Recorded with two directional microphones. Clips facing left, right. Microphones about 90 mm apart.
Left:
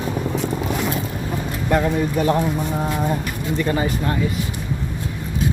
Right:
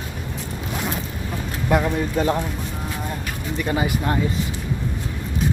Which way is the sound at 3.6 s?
10° right (ahead or behind).